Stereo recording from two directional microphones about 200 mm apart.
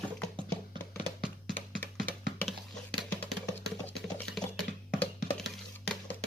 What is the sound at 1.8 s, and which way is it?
Music, 10° left (ahead or behind).